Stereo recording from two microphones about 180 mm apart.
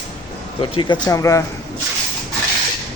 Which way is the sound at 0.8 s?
25° left (ahead or behind).